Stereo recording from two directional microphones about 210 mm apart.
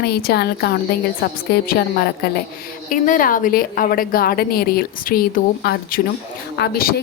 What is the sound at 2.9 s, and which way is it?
A woman's voice, 40° left (ahead or behind).